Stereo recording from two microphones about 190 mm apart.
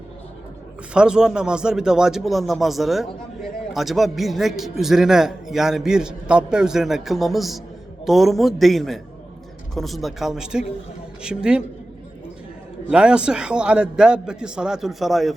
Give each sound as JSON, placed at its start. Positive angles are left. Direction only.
{"t": 0.9, "sound": "a man's voice", "side_deg": -5}
{"t": 12.9, "sound": "a man's voice", "side_deg": -5}